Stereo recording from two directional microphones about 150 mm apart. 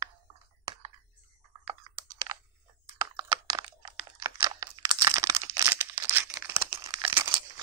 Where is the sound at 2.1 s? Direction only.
25° right (ahead or behind).